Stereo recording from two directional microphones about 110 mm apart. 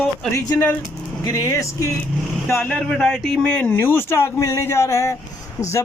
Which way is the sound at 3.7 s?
20° left (ahead or behind).